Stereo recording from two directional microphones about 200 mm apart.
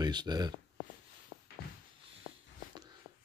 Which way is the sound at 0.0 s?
20° right (ahead or behind).